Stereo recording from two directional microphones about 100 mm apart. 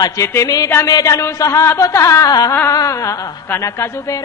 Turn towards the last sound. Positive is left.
turn(degrees=30)  # may be behind; listen again after turning